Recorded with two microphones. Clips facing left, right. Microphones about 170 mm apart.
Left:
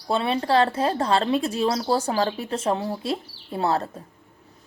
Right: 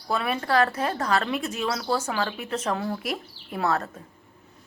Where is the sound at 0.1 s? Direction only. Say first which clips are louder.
Left 3 dB; 30° left (ahead or behind).